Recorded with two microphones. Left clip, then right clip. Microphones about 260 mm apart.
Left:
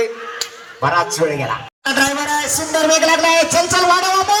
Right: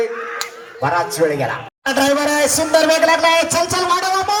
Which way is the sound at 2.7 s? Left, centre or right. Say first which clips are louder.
Even; right.